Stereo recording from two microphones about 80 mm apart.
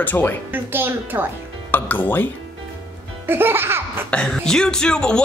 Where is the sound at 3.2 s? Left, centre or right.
Right.